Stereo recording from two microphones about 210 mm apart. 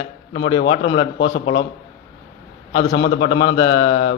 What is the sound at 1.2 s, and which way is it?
Speech, 60° left (ahead or behind).